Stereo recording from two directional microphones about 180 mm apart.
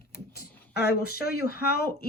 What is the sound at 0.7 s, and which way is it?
Speech, 60° left (ahead or behind).